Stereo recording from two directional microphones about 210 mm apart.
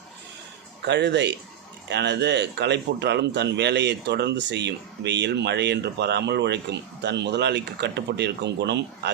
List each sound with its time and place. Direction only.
0.9 s speech: 55° right (ahead or behind)